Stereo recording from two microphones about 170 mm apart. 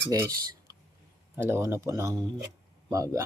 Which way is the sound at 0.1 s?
20° right (ahead or behind).